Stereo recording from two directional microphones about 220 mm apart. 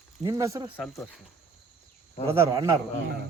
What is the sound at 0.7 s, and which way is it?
Speech, 5° left (ahead or behind).